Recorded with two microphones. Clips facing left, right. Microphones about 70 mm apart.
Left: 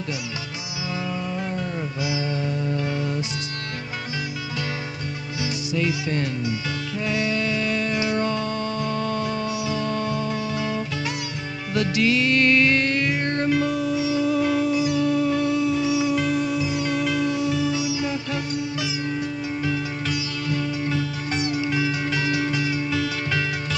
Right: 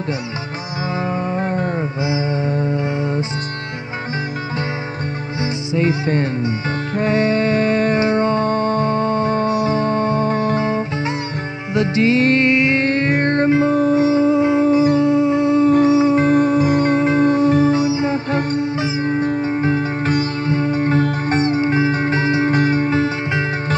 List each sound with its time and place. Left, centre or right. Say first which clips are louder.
1.0 s music: right 8 dB; right
5.4 s music: right 6 dB; right
12.4 s music: right 4 dB; right